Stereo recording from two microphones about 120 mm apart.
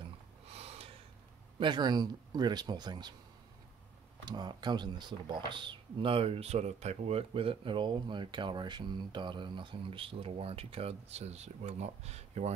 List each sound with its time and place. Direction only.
0.0 s a sound: 60° right (ahead or behind)
1.6 s speech: 40° right (ahead or behind)
4.2 s speech: 35° right (ahead or behind); by 12.5 s 65° right (ahead or behind)